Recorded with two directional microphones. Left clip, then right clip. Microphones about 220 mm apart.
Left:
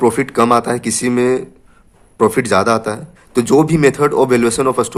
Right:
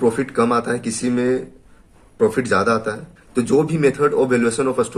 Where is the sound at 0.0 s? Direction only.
40° left (ahead or behind).